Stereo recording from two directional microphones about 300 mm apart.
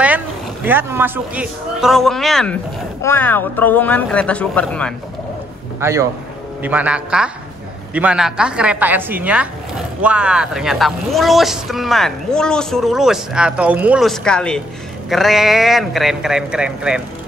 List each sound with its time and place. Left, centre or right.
0.7 s speech: centre
5.8 s a man's voice: centre